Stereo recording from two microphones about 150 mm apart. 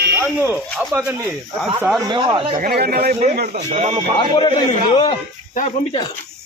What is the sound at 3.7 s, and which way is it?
Speech, 50° right (ahead or behind).